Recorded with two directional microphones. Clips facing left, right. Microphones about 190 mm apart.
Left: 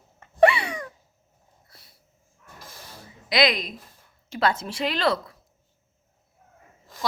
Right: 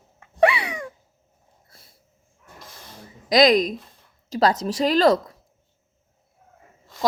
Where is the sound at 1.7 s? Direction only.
50° right (ahead or behind).